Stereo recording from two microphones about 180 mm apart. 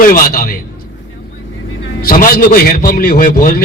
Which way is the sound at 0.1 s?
50° left (ahead or behind).